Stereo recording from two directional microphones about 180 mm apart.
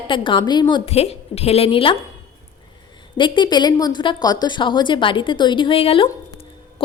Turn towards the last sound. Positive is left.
turn(degrees=30)  # may be behind; listen again after turning